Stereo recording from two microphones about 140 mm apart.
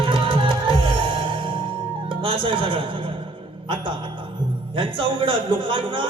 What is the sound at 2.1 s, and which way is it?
Music, 35° right (ahead or behind).